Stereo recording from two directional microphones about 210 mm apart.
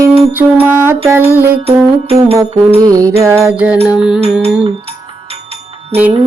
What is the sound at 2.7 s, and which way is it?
Music, 15° right (ahead or behind).